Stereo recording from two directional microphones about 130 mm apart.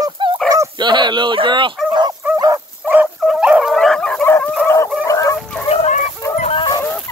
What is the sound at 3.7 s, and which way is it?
Dog, 5° left (ahead or behind).